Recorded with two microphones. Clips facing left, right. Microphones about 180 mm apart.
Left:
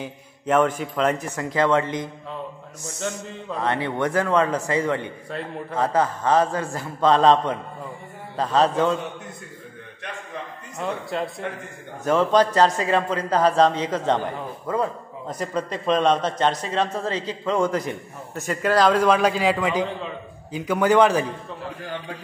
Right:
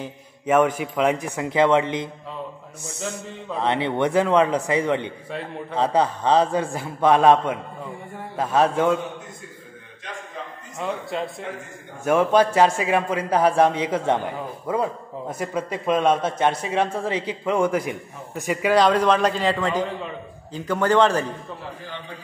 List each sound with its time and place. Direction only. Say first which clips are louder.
0.0 s a man's voice: even; 5° right (ahead or behind)
3.6 s a man's voice: right 2 dB; 20° right (ahead or behind)
5.3 s a man's voice: left 1 dB; centre (ahead or behind)
5.8 s a man's voice: right 1 dB; 15° right (ahead or behind)
10.8 s a man's voice: even; centre (ahead or behind)
18.8 s a man's voice: left 1 dB; 5° left (ahead or behind)